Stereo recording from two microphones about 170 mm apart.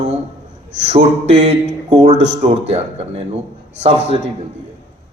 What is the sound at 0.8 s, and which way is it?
A man's voice, 40° right (ahead or behind).